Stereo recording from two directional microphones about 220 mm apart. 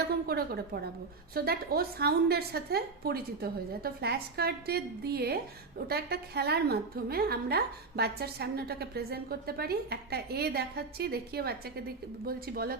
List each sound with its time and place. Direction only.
0.1 s a woman's voice: 45° right (ahead or behind)